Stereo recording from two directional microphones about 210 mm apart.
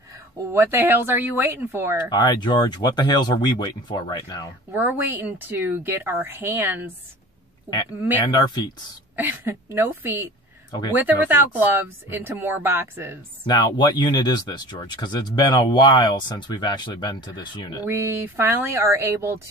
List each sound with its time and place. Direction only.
0.5 s speech: 10° right (ahead or behind)
2.0 s speech: 20° left (ahead or behind)
4.7 s speech: 10° right (ahead or behind)
8.3 s speech: 20° left (ahead or behind)
9.1 s speech: 10° right (ahead or behind)
13.5 s speech: 20° left (ahead or behind)
17.8 s speech: 10° right (ahead or behind)